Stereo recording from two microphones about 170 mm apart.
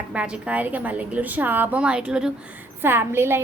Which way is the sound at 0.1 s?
5° right (ahead or behind).